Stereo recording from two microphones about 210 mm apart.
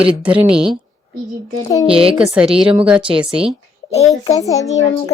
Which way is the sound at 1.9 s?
25° right (ahead or behind).